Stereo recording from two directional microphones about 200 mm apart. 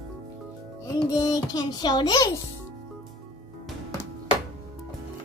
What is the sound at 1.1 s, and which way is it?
A child's voice, 20° left (ahead or behind).